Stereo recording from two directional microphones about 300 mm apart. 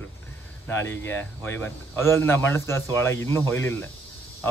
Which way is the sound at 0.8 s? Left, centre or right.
Centre.